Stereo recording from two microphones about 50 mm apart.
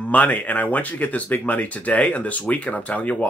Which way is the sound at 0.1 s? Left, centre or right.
Left.